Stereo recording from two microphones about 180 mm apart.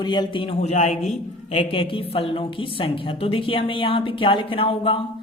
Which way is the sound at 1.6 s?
30° left (ahead or behind).